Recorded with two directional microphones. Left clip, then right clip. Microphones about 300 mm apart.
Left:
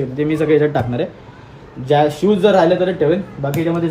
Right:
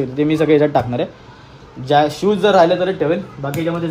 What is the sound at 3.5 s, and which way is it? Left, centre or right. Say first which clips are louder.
Speech: left 2 dB; centre.